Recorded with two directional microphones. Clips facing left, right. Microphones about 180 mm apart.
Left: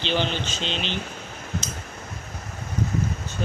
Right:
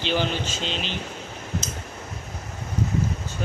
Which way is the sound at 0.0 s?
5° right (ahead or behind).